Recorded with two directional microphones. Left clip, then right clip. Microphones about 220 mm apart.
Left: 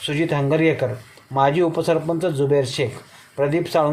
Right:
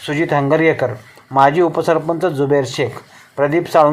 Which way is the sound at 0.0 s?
10° right (ahead or behind).